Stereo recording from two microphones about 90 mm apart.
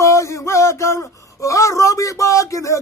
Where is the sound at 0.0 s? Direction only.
35° left (ahead or behind).